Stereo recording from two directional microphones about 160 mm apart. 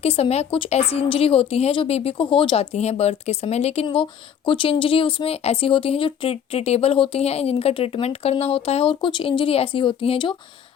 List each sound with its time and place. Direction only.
0.0 s speech: 40° left (ahead or behind)